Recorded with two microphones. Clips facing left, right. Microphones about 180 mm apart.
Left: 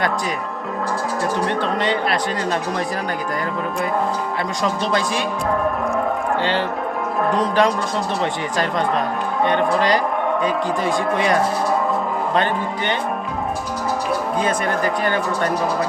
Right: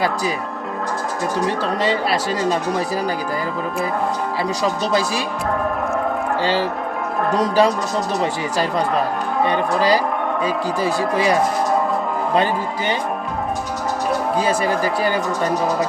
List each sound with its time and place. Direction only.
1.5 s speech: 40° right (ahead or behind)
4.9 s speech: 5° right (ahead or behind)
7.4 s speech: 5° right (ahead or behind)
10.8 s speech: 5° right (ahead or behind)
14.4 s speech: 5° right (ahead or behind)